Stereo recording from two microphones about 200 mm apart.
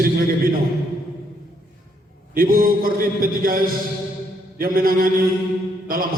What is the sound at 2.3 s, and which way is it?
A man's voice, 45° right (ahead or behind).